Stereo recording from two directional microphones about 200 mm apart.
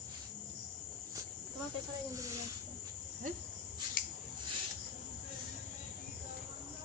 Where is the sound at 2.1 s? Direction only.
15° right (ahead or behind).